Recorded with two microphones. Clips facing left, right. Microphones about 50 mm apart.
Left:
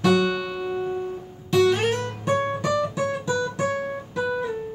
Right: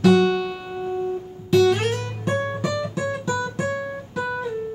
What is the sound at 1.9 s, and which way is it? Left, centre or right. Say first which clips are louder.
Music: left 1 dB; centre.